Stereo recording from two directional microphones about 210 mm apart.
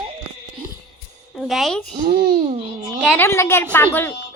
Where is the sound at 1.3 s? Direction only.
Centre (ahead or behind).